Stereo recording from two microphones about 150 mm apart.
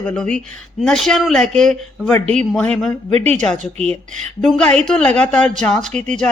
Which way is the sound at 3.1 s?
45° right (ahead or behind).